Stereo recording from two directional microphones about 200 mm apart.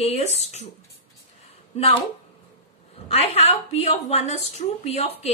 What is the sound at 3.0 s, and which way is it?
A woman's voice, 30° left (ahead or behind).